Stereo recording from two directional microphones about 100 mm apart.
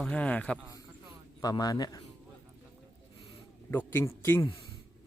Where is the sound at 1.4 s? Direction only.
40° left (ahead or behind).